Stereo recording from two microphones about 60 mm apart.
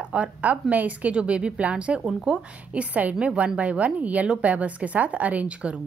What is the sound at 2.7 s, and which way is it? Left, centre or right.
A woman's voice, right.